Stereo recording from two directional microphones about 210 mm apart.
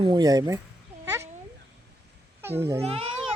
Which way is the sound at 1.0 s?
15° right (ahead or behind).